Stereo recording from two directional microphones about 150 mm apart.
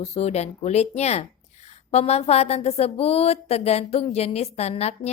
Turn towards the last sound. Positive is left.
turn(degrees=45)  # may be behind; listen again after turning